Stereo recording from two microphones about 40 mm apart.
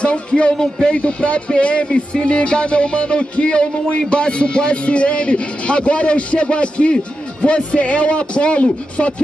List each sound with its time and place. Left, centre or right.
0.0 s speech: left
0.9 s speech: left